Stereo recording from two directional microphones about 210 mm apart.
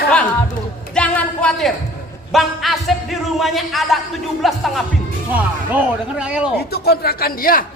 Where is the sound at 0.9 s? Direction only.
5° left (ahead or behind).